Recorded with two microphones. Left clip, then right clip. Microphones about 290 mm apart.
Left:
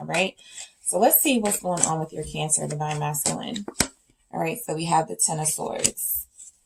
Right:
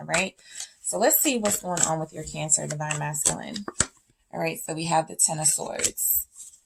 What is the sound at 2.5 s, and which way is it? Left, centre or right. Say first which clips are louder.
Speech: right 3 dB; right.